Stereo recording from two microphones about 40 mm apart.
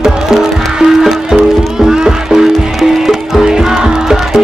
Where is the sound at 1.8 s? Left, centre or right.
Centre.